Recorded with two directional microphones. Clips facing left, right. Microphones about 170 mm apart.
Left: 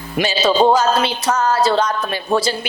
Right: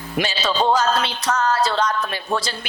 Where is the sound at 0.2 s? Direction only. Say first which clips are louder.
Left 6 dB; 10° left (ahead or behind).